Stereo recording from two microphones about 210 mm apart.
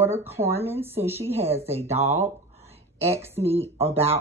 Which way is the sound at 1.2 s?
30° right (ahead or behind).